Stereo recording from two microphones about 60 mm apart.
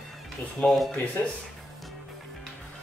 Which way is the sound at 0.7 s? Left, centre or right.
Centre.